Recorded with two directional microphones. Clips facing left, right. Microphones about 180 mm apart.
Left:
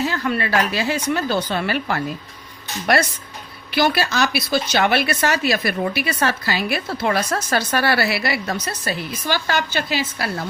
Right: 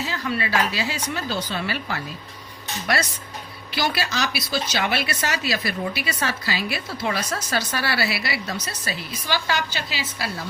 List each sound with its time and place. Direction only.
0.1 s speech: 55° left (ahead or behind)